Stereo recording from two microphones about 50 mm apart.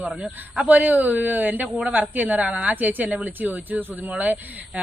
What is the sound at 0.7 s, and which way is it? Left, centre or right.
Speech, right.